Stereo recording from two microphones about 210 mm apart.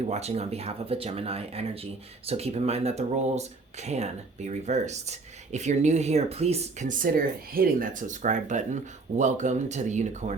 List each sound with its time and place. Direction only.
0.0 s speech: 30° right (ahead or behind)